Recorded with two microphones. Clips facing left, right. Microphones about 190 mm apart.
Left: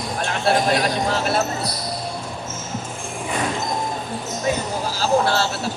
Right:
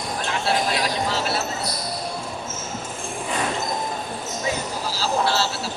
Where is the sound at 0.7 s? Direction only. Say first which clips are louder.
Left 3 dB; 50° left (ahead or behind).